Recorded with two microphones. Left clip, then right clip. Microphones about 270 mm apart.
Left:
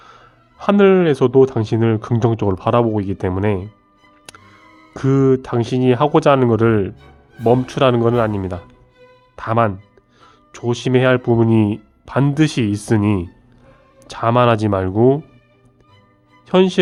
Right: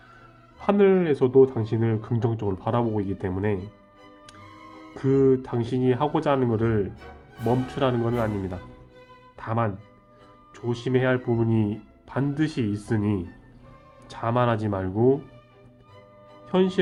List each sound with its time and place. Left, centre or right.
0.6 s speech: left
4.9 s speech: left
16.5 s speech: left